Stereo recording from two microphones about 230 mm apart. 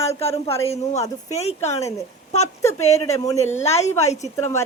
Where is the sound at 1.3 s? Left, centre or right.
Left.